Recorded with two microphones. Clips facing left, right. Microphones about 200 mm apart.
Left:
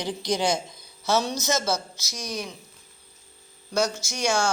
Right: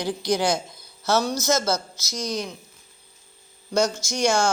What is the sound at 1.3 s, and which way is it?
Speech, 15° left (ahead or behind).